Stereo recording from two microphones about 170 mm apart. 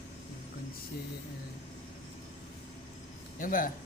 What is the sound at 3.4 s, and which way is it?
Speech, 55° left (ahead or behind).